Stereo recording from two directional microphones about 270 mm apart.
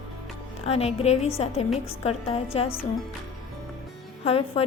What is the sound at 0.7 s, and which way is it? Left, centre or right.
A woman's voice, left.